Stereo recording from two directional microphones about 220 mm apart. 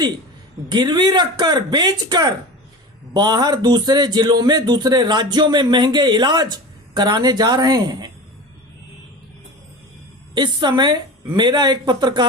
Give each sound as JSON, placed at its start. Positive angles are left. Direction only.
{"t": 0.7, "sound": "a man's voice", "side_deg": -20}
{"t": 10.3, "sound": "a man's voice", "side_deg": -20}